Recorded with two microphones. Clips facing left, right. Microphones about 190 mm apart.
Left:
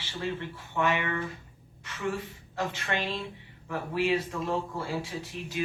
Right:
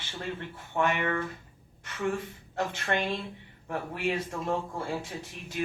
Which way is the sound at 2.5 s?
50° right (ahead or behind).